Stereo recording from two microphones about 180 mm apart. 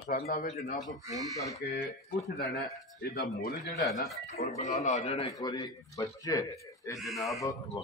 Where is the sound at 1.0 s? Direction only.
20° right (ahead or behind).